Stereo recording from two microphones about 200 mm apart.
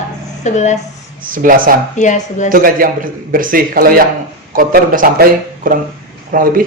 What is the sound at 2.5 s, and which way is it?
Speech, 45° right (ahead or behind).